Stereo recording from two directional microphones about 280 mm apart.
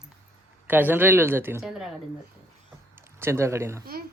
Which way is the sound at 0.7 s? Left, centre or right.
Centre.